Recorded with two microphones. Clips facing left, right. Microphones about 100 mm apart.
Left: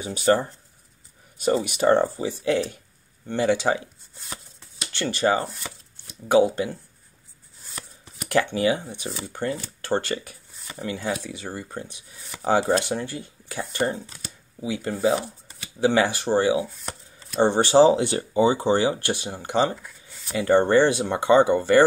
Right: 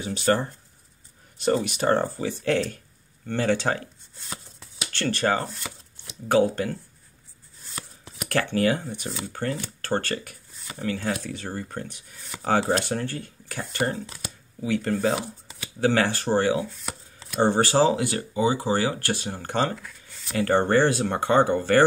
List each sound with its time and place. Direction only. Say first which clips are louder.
0.0 s speech: left 3 dB; 15° left (ahead or behind)
8.3 s speech: left 1 dB; 15° left (ahead or behind)
19.9 s a sound: even; 5° left (ahead or behind)
20.3 s speech: left 3 dB; 15° left (ahead or behind)